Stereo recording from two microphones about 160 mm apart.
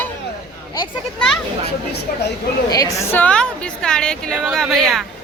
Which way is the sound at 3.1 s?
10° left (ahead or behind).